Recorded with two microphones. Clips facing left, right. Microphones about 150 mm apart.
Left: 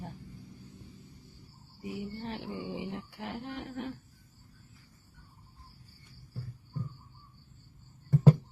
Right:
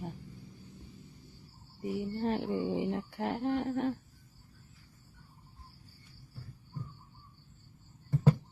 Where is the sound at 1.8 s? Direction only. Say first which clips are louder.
Right 6 dB; 45° right (ahead or behind).